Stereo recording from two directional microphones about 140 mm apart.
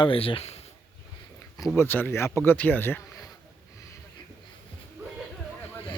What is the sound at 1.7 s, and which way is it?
Speech, 15° left (ahead or behind).